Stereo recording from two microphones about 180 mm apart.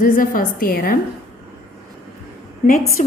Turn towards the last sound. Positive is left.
turn(degrees=40)  # may be behind; listen again after turning